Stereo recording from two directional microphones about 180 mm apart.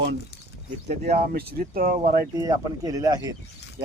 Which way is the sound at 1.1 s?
55° right (ahead or behind).